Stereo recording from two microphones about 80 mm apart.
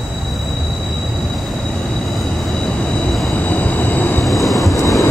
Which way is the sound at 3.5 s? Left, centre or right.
Centre.